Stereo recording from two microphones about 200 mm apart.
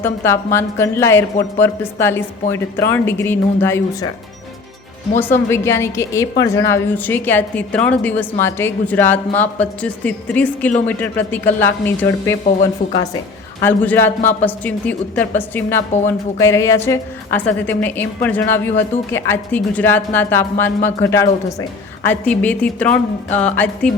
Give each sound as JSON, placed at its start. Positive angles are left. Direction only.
{"t": 0.0, "sound": "a woman's voice", "side_deg": 10}
{"t": 5.2, "sound": "a woman's voice", "side_deg": 10}
{"t": 12.8, "sound": "a woman's voice", "side_deg": 40}
{"t": 13.6, "sound": "a woman's voice", "side_deg": 10}